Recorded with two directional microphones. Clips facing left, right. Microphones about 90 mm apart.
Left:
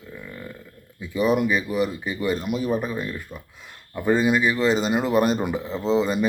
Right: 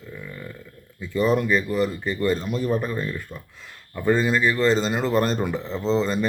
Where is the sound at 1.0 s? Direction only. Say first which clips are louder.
Even; 10° left (ahead or behind).